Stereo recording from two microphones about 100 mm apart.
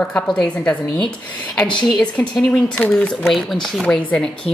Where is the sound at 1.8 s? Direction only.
10° left (ahead or behind).